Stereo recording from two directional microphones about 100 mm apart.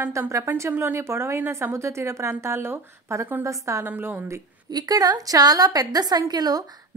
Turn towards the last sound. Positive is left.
turn(degrees=-40)  # may be behind; listen again after turning